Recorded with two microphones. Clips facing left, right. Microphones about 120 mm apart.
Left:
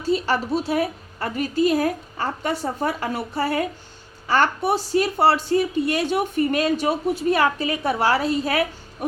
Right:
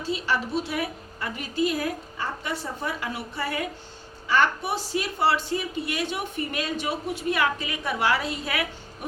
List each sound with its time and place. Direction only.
0.1 s a woman's voice: 40° left (ahead or behind)